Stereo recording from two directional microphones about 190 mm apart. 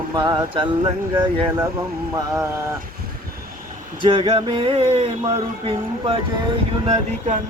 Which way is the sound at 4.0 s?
25° right (ahead or behind).